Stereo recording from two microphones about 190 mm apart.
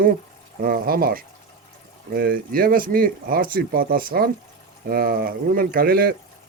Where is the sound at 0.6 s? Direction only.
50° right (ahead or behind).